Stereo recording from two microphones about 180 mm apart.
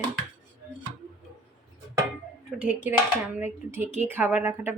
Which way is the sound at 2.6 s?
5° right (ahead or behind).